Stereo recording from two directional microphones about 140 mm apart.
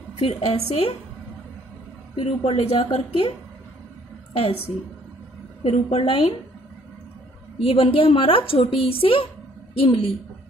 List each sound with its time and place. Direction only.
0.2 s a woman's voice: 45° left (ahead or behind)
2.1 s a woman's voice: 40° left (ahead or behind)
5.6 s a woman's voice: 45° left (ahead or behind)
7.6 s a woman's voice: 40° left (ahead or behind)